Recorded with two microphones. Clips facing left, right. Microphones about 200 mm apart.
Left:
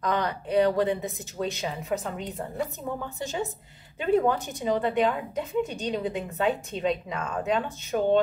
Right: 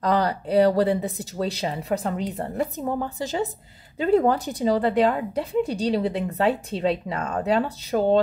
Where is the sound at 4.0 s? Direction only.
35° right (ahead or behind).